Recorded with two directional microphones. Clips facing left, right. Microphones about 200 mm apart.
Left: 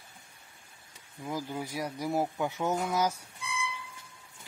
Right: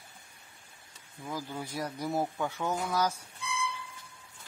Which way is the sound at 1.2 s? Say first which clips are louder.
Left 3 dB; 15° left (ahead or behind).